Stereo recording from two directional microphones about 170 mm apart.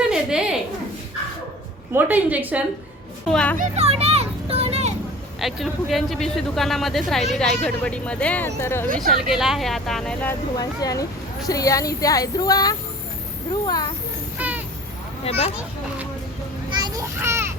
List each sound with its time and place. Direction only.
0.1 s a sound: 5° right (ahead or behind)
1.9 s a woman's voice: 10° right (ahead or behind)
3.2 s a child's voice: 5° left (ahead or behind)
3.6 s children playing: 40° right (ahead or behind)
5.4 s speech: centre (ahead or behind); by 8.9 s 15° left (ahead or behind)
9.0 s speech: centre (ahead or behind)
10.6 s speech: 20° left (ahead or behind)
14.3 s a sound: 10° right (ahead or behind)
15.2 s speech: 35° left (ahead or behind)
16.6 s children playing: 25° right (ahead or behind)